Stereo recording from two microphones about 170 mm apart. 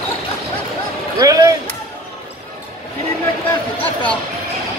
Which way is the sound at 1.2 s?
20° right (ahead or behind).